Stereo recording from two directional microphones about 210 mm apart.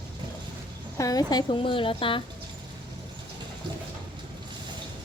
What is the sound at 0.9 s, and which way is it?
A woman's voice, 15° left (ahead or behind).